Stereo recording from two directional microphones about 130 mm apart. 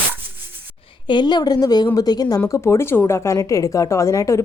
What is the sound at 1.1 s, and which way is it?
A woman's voice, 35° left (ahead or behind).